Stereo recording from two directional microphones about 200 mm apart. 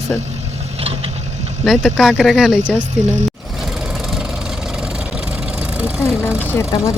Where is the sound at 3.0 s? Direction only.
35° right (ahead or behind).